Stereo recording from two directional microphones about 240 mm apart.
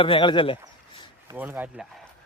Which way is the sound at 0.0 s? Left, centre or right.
Left.